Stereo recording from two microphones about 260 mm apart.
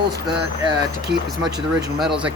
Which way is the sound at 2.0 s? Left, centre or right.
Centre.